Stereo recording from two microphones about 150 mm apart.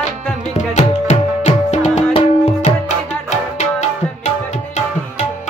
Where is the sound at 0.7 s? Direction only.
45° left (ahead or behind).